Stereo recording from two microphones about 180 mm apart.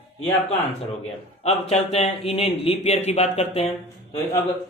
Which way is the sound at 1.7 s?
35° left (ahead or behind).